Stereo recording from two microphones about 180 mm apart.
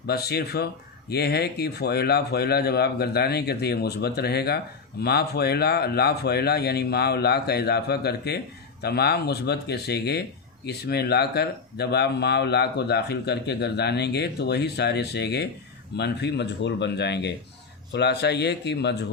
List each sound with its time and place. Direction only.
0.1 s speech: 60° left (ahead or behind)